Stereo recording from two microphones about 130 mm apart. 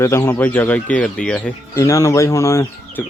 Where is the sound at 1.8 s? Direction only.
25° left (ahead or behind).